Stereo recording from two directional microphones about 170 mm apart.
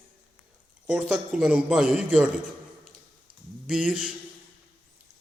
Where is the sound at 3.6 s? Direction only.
5° right (ahead or behind).